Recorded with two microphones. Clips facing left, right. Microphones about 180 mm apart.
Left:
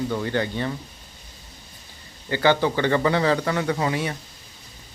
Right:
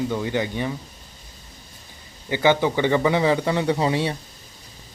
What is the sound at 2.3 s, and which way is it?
A man's voice, 15° right (ahead or behind).